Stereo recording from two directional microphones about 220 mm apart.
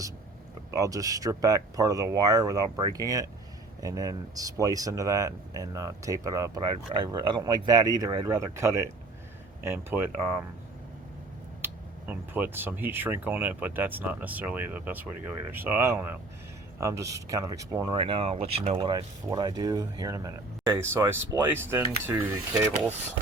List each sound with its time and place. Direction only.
0.7 s speech: 15° right (ahead or behind)
11.6 s speech: 10° right (ahead or behind)